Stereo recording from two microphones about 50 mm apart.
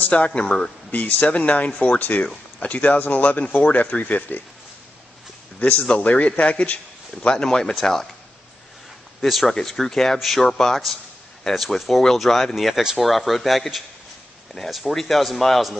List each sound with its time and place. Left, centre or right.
0.0 s speech: left
5.6 s speech: left; by 8.1 s centre
9.2 s speech: centre